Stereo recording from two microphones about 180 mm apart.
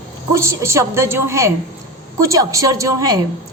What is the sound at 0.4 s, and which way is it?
A woman's voice, 15° right (ahead or behind).